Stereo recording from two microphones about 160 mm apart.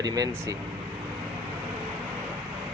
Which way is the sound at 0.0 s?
25° right (ahead or behind).